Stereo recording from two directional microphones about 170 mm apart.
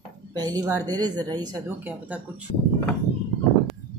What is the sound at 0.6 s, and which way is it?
Speech, 20° right (ahead or behind).